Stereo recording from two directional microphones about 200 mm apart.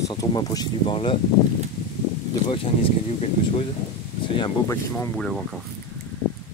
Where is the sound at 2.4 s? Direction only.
25° left (ahead or behind).